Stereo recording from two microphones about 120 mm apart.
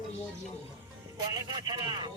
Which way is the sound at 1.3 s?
35° right (ahead or behind).